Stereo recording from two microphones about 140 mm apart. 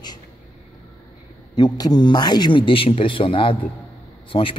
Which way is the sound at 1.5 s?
30° left (ahead or behind).